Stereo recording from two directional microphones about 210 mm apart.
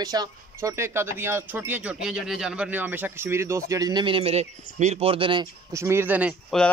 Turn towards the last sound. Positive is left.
turn(degrees=-5)  # may be behind; listen again after turning